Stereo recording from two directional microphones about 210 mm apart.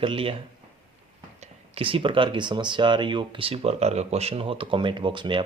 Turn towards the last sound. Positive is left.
turn(degrees=-25)  # may be behind; listen again after turning